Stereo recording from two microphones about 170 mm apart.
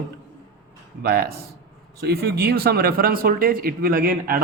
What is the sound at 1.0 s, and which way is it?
A man's voice, 65° right (ahead or behind).